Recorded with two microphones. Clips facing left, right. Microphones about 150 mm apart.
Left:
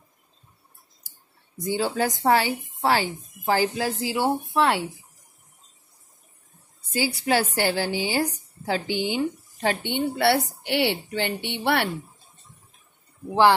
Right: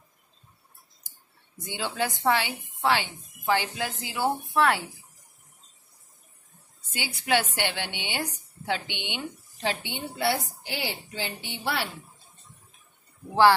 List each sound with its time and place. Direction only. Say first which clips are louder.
1.6 s a woman's voice: left 6 dB; 40° left (ahead or behind)
6.9 s a woman's voice: left 4 dB; 35° left (ahead or behind); by 11.9 s 65° left (ahead or behind)